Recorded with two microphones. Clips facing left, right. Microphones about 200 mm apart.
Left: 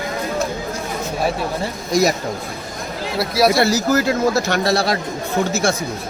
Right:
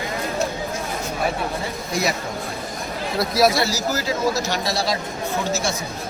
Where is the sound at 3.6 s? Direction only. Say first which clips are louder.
Left 7 dB; 55° left (ahead or behind).